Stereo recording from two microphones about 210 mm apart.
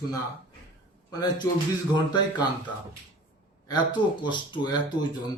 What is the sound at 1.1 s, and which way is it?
Speech, 20° left (ahead or behind).